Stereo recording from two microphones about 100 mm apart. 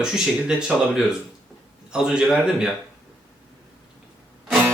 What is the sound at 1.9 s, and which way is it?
Speech, 5° right (ahead or behind).